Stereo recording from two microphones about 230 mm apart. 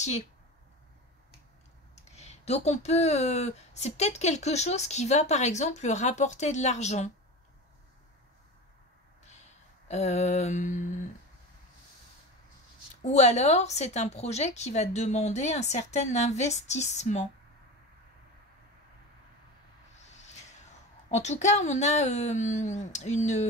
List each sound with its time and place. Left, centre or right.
2.1 s speech: left
9.8 s speech: left
12.9 s speech: left
21.1 s speech: left